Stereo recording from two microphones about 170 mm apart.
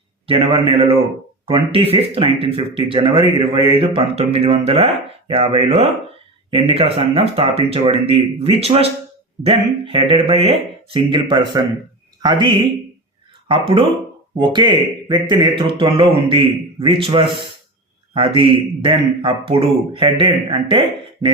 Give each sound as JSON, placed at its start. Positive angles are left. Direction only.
{"t": 0.3, "sound": "a man's voice", "side_deg": -35}